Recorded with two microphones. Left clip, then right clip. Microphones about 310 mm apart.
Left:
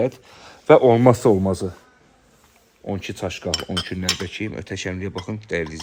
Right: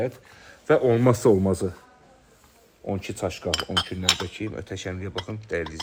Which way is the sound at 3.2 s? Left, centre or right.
Left.